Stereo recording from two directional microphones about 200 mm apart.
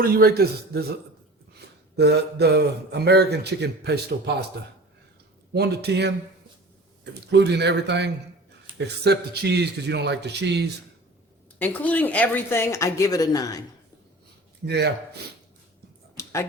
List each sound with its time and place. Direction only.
0.0 s a man's voice: 50° right (ahead or behind)
2.0 s a man's voice: 55° right (ahead or behind)
5.5 s a man's voice: 55° right (ahead or behind)
11.6 s speech: 10° left (ahead or behind)
14.6 s speech: 55° right (ahead or behind)
16.1 s a sound: 15° left (ahead or behind)